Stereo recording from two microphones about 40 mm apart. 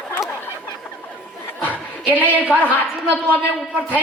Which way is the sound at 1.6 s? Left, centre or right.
Left.